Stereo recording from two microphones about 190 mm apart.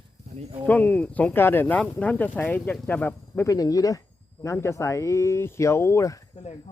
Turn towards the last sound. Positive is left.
turn(degrees=15)  # may be behind; listen again after turning